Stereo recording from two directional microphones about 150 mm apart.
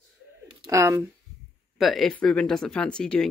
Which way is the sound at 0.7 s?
20° right (ahead or behind).